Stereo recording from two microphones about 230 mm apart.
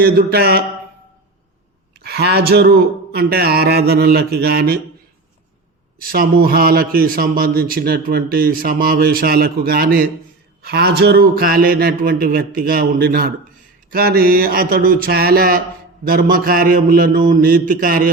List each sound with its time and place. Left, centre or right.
0.0 s a man's voice: right
2.0 s a sound: right
6.1 s a man's voice: right